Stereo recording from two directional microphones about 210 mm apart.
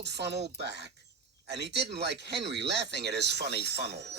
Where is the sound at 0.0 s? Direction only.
55° right (ahead or behind).